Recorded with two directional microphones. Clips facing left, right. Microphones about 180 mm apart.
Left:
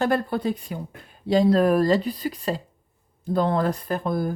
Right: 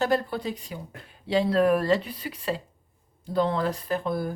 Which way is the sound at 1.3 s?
40° left (ahead or behind).